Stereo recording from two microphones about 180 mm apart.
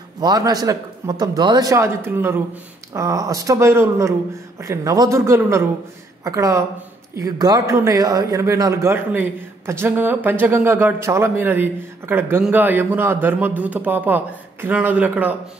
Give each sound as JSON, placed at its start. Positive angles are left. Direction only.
{"t": 0.2, "sound": "a man's voice", "side_deg": -20}